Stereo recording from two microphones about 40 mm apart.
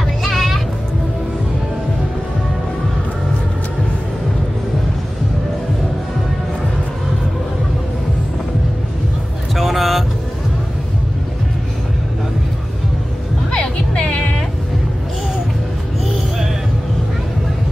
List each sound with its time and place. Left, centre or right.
0.2 s music: centre
9.6 s vehicle: centre
13.5 s music: left